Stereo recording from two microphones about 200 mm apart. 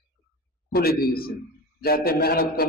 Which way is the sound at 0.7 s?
50° left (ahead or behind).